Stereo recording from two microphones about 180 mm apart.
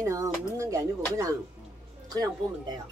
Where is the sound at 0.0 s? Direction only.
15° right (ahead or behind).